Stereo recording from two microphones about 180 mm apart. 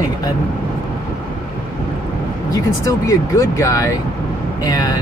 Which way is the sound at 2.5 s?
20° left (ahead or behind).